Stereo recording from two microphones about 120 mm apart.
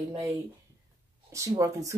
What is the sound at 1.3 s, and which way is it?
Speech, 25° right (ahead or behind).